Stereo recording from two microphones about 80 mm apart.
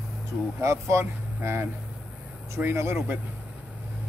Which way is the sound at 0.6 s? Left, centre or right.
Right.